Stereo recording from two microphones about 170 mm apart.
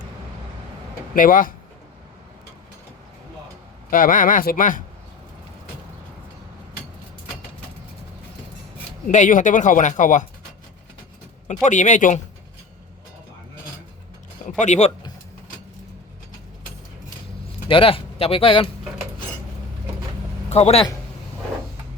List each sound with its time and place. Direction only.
1.1 s speech: 55° left (ahead or behind)
3.8 s speech: 55° left (ahead or behind)
9.0 s speech: 50° left (ahead or behind)
11.4 s speech: 45° left (ahead or behind)
14.6 s speech: 40° left (ahead or behind)
17.7 s speech: 30° left (ahead or behind)
20.5 s a man's voice: 40° left (ahead or behind)